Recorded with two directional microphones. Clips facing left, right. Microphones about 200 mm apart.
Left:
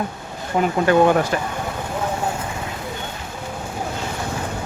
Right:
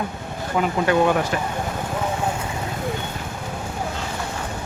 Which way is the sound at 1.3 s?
40° left (ahead or behind).